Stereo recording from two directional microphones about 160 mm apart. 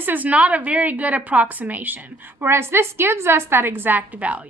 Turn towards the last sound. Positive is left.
turn(degrees=-10)  # may be behind; listen again after turning